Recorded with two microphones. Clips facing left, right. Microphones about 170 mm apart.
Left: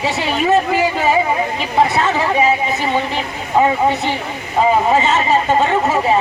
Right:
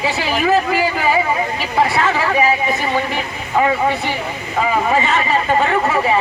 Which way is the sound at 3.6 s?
25° left (ahead or behind).